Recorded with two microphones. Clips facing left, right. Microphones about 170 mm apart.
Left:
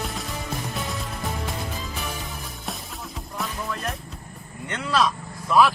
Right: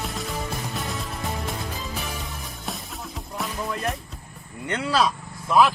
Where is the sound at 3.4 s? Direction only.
Centre (ahead or behind).